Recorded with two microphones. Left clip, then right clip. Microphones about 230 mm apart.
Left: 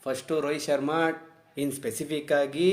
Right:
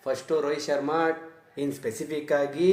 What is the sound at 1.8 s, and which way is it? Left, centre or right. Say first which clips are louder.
Speech: even; left.